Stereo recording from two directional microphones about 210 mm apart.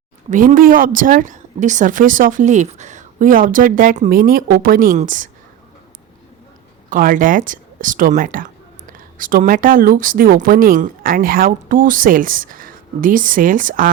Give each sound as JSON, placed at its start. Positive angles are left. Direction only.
{"t": 0.3, "sound": "a woman's voice", "side_deg": -40}
{"t": 6.9, "sound": "a woman's voice", "side_deg": -40}